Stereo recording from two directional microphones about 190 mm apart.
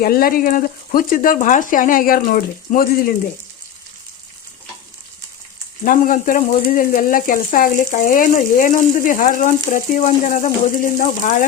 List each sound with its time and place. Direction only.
0.0 s speech: 50° left (ahead or behind)
5.8 s speech: 45° left (ahead or behind)